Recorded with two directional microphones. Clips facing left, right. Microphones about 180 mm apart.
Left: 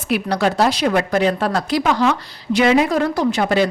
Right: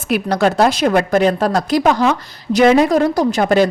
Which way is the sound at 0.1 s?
45° right (ahead or behind).